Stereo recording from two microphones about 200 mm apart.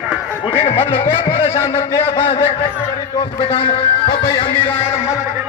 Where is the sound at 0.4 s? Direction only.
30° left (ahead or behind).